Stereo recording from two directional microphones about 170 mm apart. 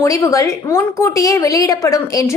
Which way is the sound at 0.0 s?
20° left (ahead or behind).